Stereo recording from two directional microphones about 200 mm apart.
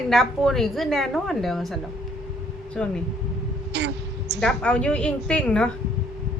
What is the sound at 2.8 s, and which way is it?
Speech, centre (ahead or behind).